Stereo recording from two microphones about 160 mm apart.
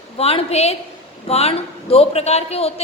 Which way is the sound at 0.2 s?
40° left (ahead or behind).